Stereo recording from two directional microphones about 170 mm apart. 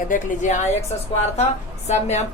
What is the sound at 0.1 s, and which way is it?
Speech, 50° left (ahead or behind).